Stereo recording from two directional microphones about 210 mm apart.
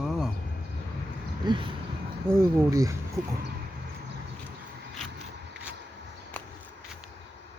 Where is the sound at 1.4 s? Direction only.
20° right (ahead or behind).